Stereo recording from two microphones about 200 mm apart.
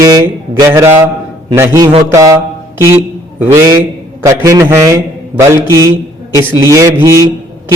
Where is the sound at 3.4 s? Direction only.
15° right (ahead or behind).